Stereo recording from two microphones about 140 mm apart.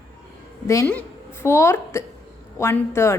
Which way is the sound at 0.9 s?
15° left (ahead or behind).